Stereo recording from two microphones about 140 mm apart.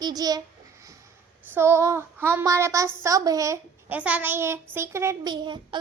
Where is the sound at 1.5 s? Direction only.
15° right (ahead or behind).